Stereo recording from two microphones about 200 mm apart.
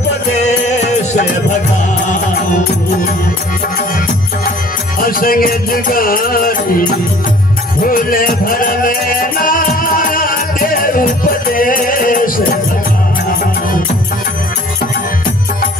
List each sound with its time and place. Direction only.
0.4 s music: 35° left (ahead or behind)
5.0 s music: 45° left (ahead or behind)